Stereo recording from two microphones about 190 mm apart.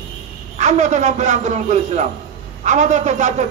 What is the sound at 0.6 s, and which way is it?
A man's voice, 40° right (ahead or behind).